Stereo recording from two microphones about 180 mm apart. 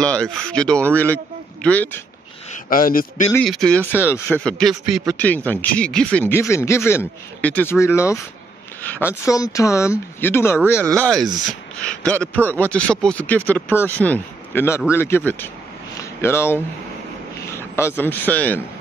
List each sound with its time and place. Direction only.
0.0 s a man's voice: 5° left (ahead or behind)
2.5 s speech: 50° left (ahead or behind)
3.4 s speech: 5° left (ahead or behind)
4.5 s speech: centre (ahead or behind)
10.8 s a man's voice: 5° left (ahead or behind)